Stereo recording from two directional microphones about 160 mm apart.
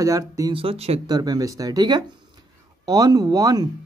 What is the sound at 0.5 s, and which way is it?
Speech, 40° right (ahead or behind).